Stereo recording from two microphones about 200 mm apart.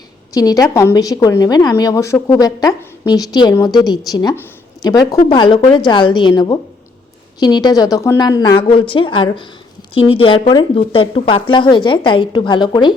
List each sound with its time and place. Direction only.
0.3 s a woman's voice: 15° left (ahead or behind)